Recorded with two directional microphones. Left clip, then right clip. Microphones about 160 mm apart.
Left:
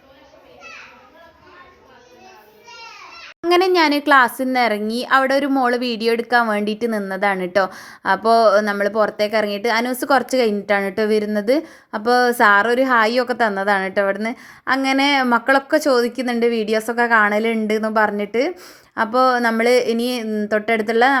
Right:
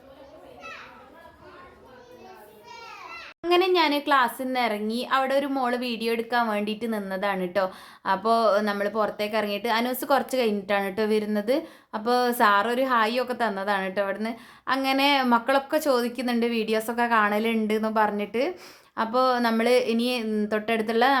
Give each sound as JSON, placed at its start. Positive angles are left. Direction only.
{"t": 3.4, "sound": "a woman's voice", "side_deg": 50}
{"t": 20.3, "sound": "speech", "side_deg": 20}